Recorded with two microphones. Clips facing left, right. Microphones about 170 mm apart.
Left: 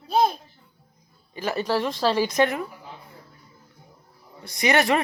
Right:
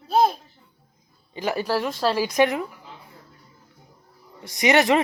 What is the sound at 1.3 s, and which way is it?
Speech, 15° right (ahead or behind).